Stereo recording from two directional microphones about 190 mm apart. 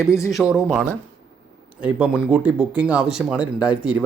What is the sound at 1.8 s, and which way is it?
Speech, 5° right (ahead or behind).